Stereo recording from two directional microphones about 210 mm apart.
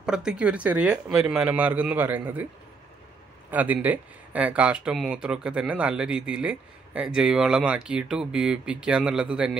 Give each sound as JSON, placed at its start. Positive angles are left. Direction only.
{"t": 0.0, "sound": "speech", "side_deg": -5}
{"t": 3.4, "sound": "speech", "side_deg": -10}